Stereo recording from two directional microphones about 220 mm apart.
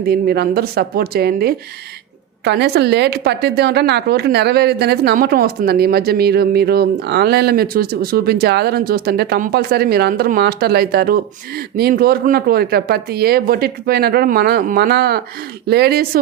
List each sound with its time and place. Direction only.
0.0 s a woman's voice: 45° right (ahead or behind)